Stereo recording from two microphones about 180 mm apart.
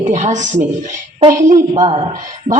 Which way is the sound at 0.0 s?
40° right (ahead or behind).